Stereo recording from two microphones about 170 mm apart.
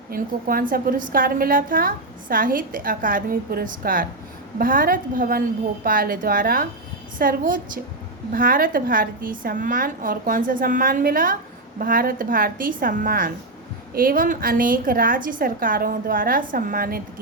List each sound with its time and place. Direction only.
0.1 s a woman's voice: 55° right (ahead or behind)